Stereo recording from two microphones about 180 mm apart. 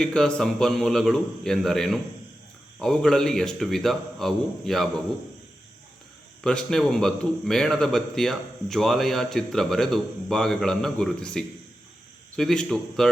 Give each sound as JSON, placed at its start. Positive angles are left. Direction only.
{"t": 0.0, "sound": "a man's voice", "side_deg": 5}
{"t": 6.4, "sound": "a man's voice", "side_deg": 5}